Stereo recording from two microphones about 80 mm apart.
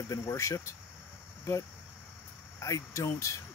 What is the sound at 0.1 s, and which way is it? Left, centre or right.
Speech, left.